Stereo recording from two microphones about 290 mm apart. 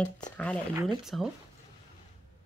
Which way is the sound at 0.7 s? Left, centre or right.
Centre.